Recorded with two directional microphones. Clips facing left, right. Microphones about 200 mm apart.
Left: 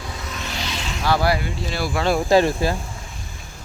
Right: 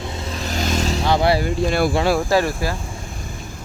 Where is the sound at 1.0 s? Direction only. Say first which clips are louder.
Right 1 dB; 20° right (ahead or behind).